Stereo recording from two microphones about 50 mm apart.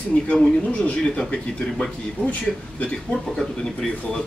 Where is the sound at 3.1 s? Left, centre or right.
Centre.